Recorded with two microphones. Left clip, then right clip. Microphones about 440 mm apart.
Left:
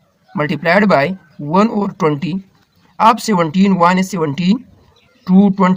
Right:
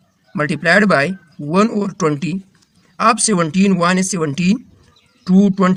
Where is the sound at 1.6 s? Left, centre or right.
Right.